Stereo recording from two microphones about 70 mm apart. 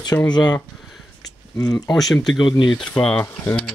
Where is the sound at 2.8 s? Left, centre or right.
Centre.